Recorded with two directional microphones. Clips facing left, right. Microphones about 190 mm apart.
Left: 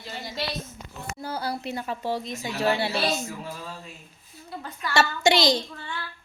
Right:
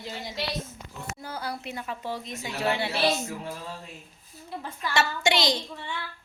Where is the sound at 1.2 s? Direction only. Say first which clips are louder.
Left 5 dB; 35° left (ahead or behind).